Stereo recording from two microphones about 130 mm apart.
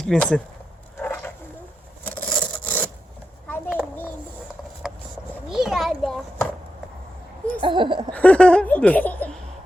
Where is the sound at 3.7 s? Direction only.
15° left (ahead or behind).